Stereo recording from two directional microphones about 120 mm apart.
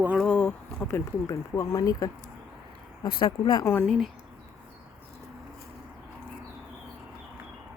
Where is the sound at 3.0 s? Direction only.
45° left (ahead or behind).